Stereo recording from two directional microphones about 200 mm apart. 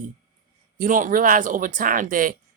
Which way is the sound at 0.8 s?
40° right (ahead or behind).